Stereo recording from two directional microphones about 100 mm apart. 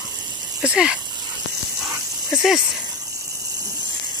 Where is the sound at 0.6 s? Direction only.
10° right (ahead or behind).